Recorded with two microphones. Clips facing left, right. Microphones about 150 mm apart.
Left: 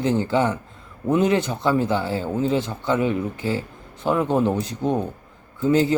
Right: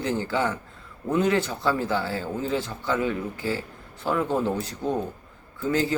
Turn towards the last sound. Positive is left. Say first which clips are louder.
# left 6 dB
turn(degrees=20)  # may be behind; listen again after turning